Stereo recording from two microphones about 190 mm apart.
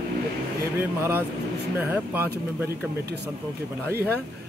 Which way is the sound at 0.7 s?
10° right (ahead or behind).